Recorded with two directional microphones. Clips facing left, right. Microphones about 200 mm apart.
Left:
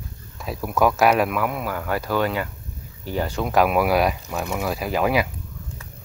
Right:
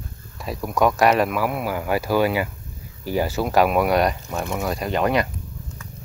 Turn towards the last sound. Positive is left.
turn(degrees=5)  # may be behind; listen again after turning